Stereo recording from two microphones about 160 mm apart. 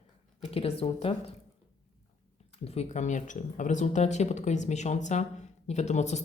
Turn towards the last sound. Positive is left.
turn(degrees=45)  # may be behind; listen again after turning